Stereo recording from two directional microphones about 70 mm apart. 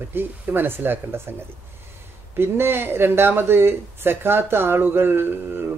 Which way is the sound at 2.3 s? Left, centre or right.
Right.